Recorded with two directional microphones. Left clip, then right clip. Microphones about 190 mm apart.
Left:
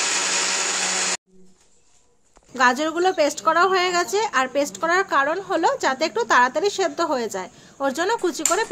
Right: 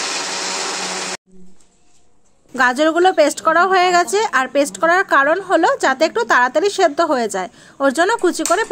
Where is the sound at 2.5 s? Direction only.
45° right (ahead or behind).